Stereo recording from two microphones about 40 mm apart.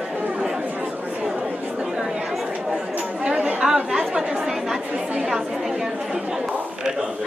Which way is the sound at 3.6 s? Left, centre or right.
Centre.